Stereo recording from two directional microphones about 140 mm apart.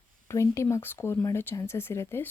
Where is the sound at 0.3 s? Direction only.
20° left (ahead or behind).